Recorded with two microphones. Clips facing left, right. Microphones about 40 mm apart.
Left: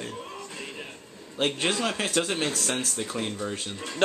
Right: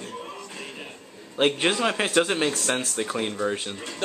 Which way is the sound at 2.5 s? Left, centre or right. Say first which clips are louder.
Right 3 dB; centre.